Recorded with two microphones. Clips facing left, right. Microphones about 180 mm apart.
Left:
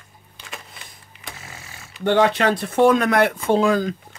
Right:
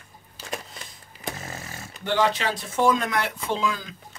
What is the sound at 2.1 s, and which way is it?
Speech, 60° left (ahead or behind).